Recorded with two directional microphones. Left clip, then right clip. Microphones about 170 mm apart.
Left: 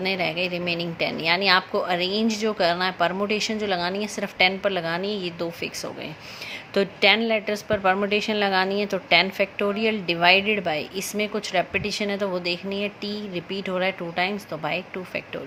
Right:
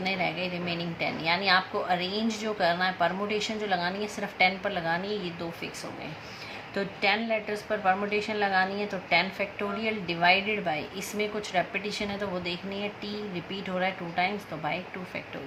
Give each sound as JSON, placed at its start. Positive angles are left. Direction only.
{"t": 0.0, "sound": "speech", "side_deg": 50}
{"t": 6.7, "sound": "speech", "side_deg": 60}